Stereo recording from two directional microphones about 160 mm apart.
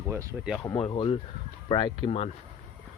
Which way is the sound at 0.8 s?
30° left (ahead or behind).